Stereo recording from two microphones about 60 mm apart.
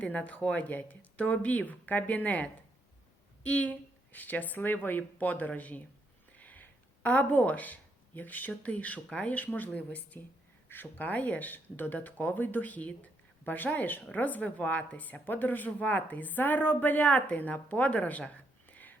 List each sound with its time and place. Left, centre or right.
0.0 s speech: left